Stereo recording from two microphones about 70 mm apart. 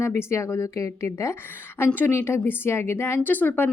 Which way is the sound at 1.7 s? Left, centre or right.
Left.